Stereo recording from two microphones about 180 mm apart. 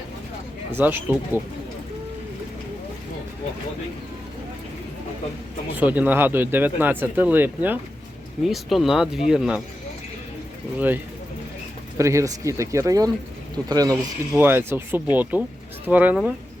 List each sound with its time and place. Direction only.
0.8 s speech: 10° right (ahead or behind)
5.7 s speech: 10° right (ahead or behind)
10.8 s speech: 10° right (ahead or behind)